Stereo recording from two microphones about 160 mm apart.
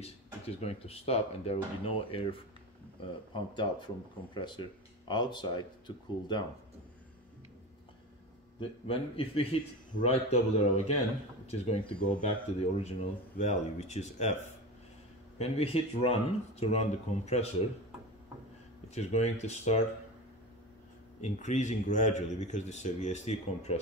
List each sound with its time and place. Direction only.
0.6 s speech: 40° left (ahead or behind)
3.5 s speech: 30° left (ahead or behind)
8.5 s a man's voice: 35° left (ahead or behind)
15.3 s speech: 40° left (ahead or behind)
18.9 s a man's voice: 45° left (ahead or behind)
21.2 s a man's voice: 45° left (ahead or behind)